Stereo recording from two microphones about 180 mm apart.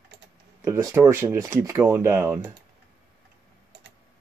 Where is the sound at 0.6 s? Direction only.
15° right (ahead or behind).